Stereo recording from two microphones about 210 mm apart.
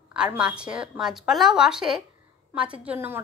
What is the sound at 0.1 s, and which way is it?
A woman's voice, 5° right (ahead or behind).